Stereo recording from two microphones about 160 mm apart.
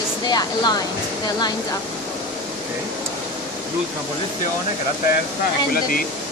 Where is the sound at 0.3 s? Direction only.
25° left (ahead or behind).